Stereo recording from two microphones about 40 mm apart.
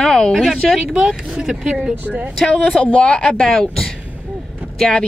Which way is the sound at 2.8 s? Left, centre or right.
Left.